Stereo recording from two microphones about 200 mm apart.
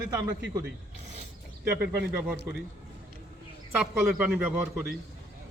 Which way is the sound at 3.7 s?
5° right (ahead or behind).